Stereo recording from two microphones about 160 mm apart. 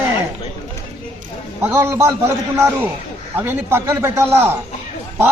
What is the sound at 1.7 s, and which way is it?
A man's voice, 15° right (ahead or behind).